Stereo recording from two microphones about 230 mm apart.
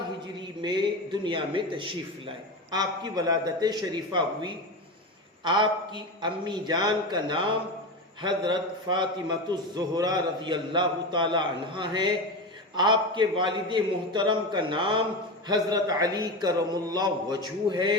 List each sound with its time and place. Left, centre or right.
0.6 s a man's voice: centre